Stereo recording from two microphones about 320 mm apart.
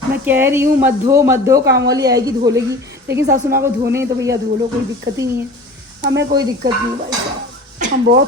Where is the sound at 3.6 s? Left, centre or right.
Centre.